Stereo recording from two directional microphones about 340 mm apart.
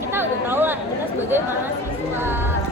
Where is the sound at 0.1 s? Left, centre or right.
Centre.